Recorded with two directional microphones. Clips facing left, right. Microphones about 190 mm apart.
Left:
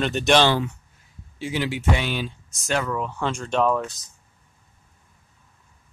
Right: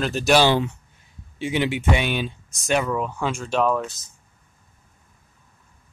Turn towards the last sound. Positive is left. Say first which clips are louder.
# even
turn(degrees=0)  # may be behind; listen again after turning